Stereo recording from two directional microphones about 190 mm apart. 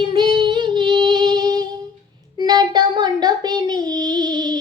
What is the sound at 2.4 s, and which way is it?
Child singing, 20° right (ahead or behind).